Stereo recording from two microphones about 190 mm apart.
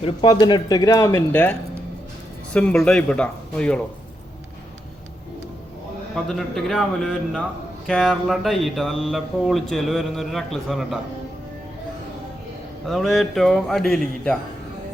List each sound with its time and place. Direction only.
0.0 s speech: 25° left (ahead or behind); by 3.8 s 5° left (ahead or behind)
6.2 s speech: centre (ahead or behind)
12.8 s speech: centre (ahead or behind)